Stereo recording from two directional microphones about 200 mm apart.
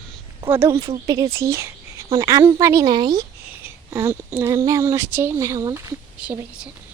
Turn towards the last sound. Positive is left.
turn(degrees=-5)  # may be behind; listen again after turning